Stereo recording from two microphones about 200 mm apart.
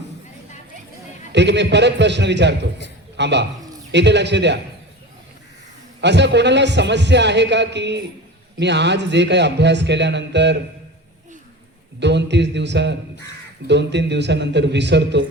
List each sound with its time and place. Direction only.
1.3 s a man's voice: 60° right (ahead or behind)
6.0 s a man's voice: 60° right (ahead or behind)
11.9 s a man's voice: 60° right (ahead or behind)